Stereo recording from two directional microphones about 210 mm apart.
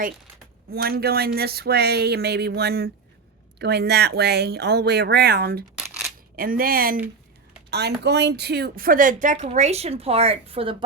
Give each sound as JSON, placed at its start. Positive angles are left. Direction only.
{"t": 0.7, "sound": "speech", "side_deg": -50}
{"t": 5.7, "sound": "coin", "side_deg": 0}
{"t": 6.3, "sound": "a woman's voice", "side_deg": -45}